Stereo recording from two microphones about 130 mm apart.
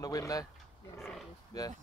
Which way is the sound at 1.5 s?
30° left (ahead or behind).